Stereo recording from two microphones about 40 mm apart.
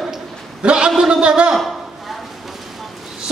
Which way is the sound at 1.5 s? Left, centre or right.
Centre.